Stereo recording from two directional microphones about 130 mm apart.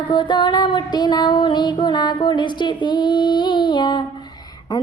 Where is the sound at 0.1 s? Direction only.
35° left (ahead or behind).